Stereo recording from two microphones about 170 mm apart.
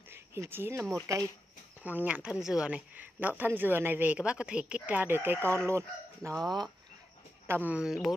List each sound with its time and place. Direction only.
0.1 s speech: 15° right (ahead or behind)
7.4 s speech: 10° right (ahead or behind)